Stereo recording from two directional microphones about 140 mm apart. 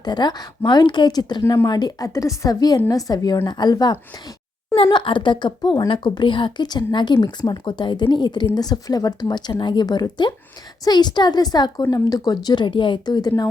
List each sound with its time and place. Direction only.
0.0 s speech: 30° left (ahead or behind)